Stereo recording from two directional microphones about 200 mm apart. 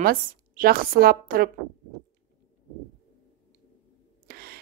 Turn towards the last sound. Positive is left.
turn(degrees=-50)  # may be behind; listen again after turning